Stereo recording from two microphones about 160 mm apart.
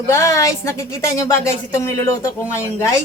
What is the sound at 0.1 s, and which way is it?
A woman's voice, 20° left (ahead or behind).